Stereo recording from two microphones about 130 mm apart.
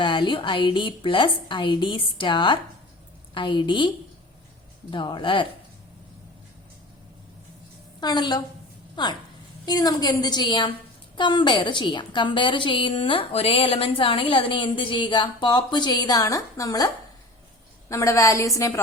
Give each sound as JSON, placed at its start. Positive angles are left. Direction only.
{"t": 0.0, "sound": "a woman's voice", "side_deg": 40}
{"t": 8.0, "sound": "a woman's voice", "side_deg": 35}